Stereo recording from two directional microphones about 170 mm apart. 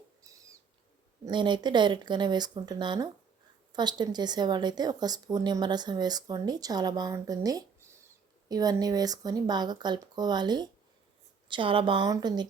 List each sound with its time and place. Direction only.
0.2 s owl: 20° right (ahead or behind)
1.2 s a woman's voice: 25° right (ahead or behind)